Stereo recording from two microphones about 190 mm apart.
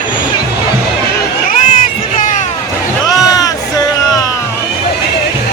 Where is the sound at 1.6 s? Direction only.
45° left (ahead or behind).